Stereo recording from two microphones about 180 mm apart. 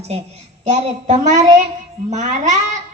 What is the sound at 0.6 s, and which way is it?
A woman's voice, 40° right (ahead or behind).